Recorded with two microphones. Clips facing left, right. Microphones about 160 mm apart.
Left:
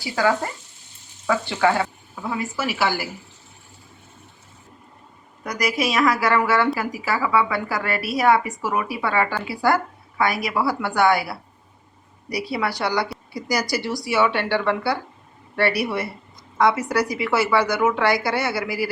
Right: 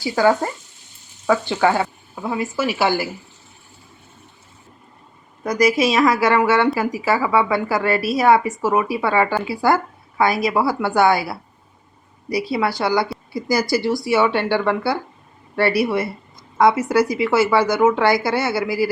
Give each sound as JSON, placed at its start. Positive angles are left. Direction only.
{"t": 1.3, "sound": "a woman's voice", "side_deg": -30}
{"t": 5.4, "sound": "a woman's voice", "side_deg": -25}